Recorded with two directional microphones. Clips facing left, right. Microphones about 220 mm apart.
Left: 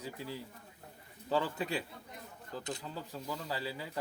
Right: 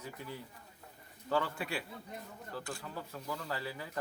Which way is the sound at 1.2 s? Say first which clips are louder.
Left 1 dB; 15° left (ahead or behind).